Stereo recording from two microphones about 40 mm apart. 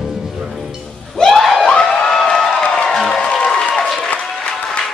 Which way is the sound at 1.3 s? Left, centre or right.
Centre.